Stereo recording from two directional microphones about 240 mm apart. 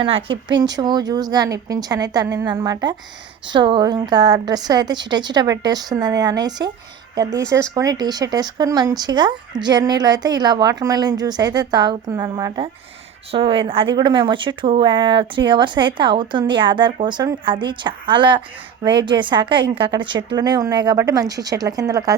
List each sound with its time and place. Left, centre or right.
0.0 s speech: right